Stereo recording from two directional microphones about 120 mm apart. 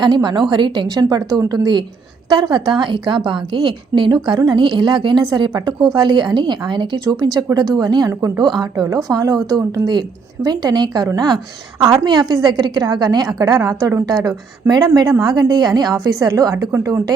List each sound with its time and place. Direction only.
0.0 s a woman's voice: 40° right (ahead or behind)